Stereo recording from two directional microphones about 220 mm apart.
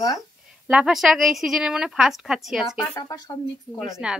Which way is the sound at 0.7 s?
5° right (ahead or behind).